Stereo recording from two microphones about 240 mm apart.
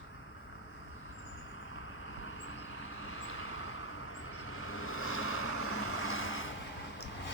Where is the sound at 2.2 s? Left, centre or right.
Left.